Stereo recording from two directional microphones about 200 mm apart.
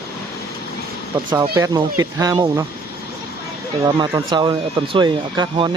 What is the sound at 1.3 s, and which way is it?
Speech, 15° right (ahead or behind).